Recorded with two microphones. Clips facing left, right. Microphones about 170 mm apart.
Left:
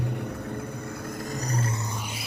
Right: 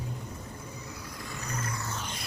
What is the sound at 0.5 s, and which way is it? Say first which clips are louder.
Vehicle: left 8 dB; 55° left (ahead or behind).